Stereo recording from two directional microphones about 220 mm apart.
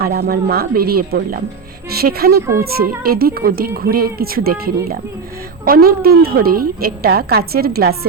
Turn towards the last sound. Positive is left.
turn(degrees=-45)  # may be behind; listen again after turning